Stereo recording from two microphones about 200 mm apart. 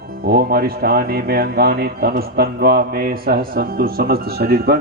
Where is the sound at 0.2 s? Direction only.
50° right (ahead or behind).